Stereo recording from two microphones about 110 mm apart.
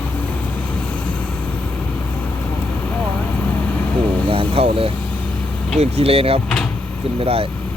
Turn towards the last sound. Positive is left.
turn(degrees=-60)  # may be behind; listen again after turning